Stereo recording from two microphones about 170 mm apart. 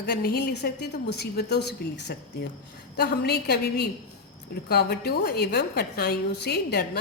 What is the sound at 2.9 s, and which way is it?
A woman's voice, 70° left (ahead or behind).